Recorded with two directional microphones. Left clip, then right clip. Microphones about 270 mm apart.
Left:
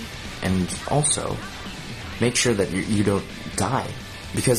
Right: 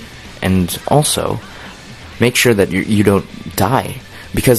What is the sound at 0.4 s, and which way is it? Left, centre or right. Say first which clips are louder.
Speech: right 9 dB; right.